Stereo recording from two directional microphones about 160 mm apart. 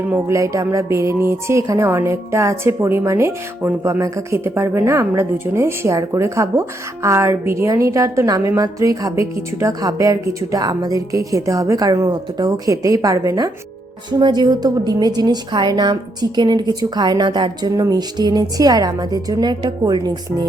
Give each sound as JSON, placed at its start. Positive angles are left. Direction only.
{"t": 0.1, "sound": "speech", "side_deg": -20}